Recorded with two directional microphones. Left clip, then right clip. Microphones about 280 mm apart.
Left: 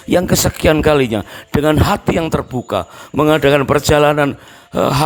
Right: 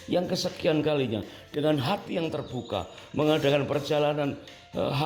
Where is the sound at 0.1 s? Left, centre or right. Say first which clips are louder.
Left 13 dB; left.